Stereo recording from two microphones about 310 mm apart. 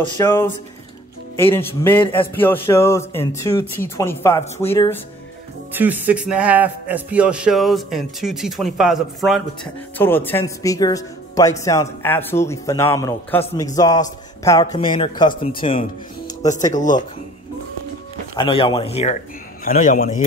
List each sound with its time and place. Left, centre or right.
0.2 s speech: centre
5.7 s speech: centre
18.3 s a man's voice: centre